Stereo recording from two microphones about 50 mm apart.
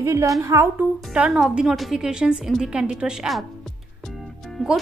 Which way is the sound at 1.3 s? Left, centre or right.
Centre.